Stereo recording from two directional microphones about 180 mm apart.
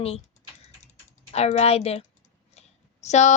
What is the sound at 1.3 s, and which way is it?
Speech, 35° left (ahead or behind).